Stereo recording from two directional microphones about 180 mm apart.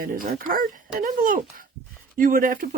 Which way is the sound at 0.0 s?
50° right (ahead or behind).